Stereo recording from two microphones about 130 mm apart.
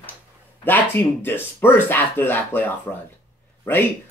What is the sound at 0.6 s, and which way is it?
Speech, 15° left (ahead or behind).